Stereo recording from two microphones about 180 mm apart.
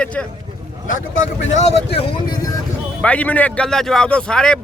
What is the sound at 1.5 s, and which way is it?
Speech, 40° left (ahead or behind).